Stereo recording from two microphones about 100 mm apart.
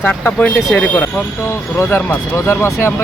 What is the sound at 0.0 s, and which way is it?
Speech, 15° left (ahead or behind).